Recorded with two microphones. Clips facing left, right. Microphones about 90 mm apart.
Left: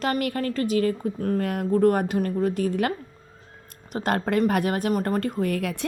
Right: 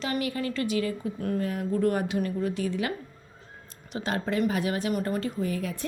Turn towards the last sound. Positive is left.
turn(degrees=70)  # may be behind; listen again after turning